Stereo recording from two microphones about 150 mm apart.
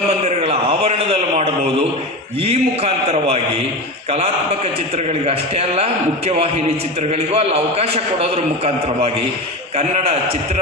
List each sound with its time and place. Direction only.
0.1 s a sound: 45° right (ahead or behind)
2.4 s a man's voice: 45° right (ahead or behind)
5.2 s a man's voice: 45° right (ahead or behind)